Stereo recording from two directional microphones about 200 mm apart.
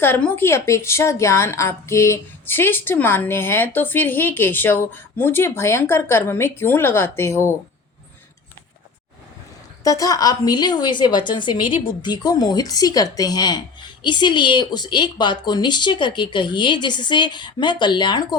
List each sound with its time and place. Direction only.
0.0 s a woman's voice: 10° left (ahead or behind)
9.8 s a woman's voice: 15° left (ahead or behind)